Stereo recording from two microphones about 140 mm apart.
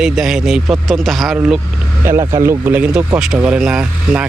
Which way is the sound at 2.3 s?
20° right (ahead or behind).